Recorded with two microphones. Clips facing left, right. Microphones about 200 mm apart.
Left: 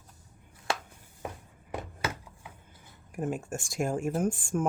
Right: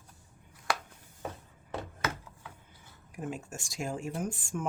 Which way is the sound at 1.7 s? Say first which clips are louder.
Left 1 dB; 15° left (ahead or behind).